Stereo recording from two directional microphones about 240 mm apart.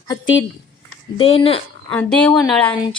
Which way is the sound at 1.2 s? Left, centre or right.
Left.